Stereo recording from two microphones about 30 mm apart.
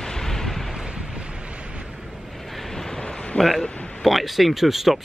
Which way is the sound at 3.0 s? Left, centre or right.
Left.